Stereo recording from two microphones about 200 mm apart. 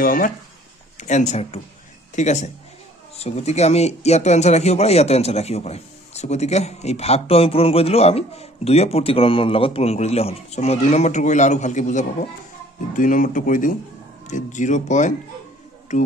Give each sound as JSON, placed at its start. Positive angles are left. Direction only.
{"t": 0.0, "sound": "speech", "side_deg": 45}